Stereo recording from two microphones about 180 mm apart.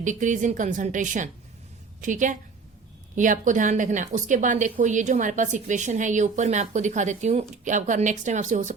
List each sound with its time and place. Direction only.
0.0 s a woman's voice: 45° right (ahead or behind)